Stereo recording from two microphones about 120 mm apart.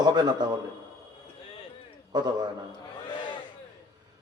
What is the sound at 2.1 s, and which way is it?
Speech, 35° right (ahead or behind).